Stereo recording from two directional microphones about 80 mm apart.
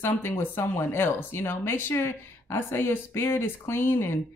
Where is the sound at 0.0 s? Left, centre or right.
Left.